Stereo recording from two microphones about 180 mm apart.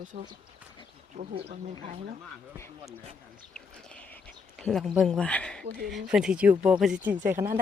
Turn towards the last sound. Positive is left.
turn(degrees=-10)  # may be behind; listen again after turning